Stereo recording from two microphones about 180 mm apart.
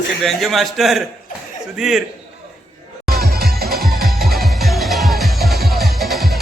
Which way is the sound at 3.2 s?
60° right (ahead or behind).